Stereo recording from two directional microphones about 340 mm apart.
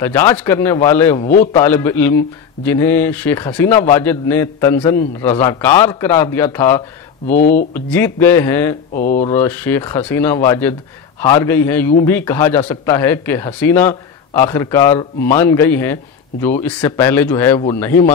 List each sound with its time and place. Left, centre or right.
0.0 s speech: centre
1.2 s speech: left
1.6 s speech: centre
7.3 s speech: left
7.7 s speech: centre
8.9 s speech: left
9.3 s speech: centre